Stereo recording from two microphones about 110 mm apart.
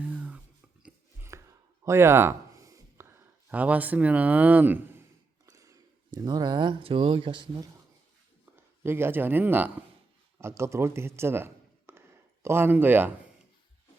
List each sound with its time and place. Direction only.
0.0 s whispering: 15° right (ahead or behind)
1.3 s a sound: 25° right (ahead or behind)
1.8 s speech: 25° right (ahead or behind)
5.5 s a sound: 30° right (ahead or behind)
6.1 s speech: 40° right (ahead or behind)
8.8 s a man's voice: 20° right (ahead or behind)